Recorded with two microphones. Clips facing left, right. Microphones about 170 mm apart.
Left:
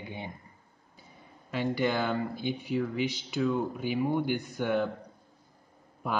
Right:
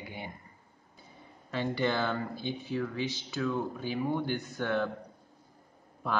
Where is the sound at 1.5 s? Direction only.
15° left (ahead or behind).